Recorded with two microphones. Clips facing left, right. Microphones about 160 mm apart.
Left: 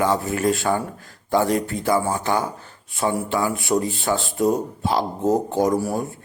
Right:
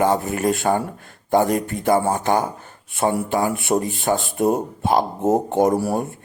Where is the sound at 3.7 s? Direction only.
25° right (ahead or behind).